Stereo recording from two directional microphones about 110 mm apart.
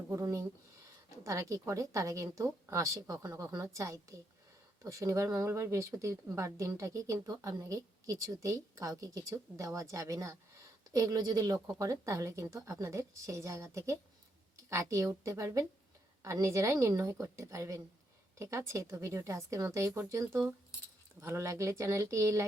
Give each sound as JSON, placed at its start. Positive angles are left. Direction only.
{"t": 0.1, "sound": "speech", "side_deg": -25}